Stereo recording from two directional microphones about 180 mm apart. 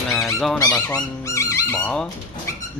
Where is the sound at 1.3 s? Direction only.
15° left (ahead or behind).